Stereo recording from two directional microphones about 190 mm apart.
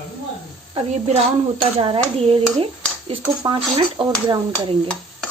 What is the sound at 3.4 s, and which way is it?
Speech, 25° right (ahead or behind).